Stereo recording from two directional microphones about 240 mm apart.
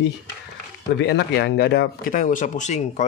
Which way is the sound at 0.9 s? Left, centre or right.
Left.